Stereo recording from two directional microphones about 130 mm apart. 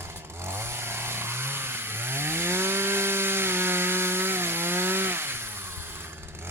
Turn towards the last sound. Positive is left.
turn(degrees=-15)  # may be behind; listen again after turning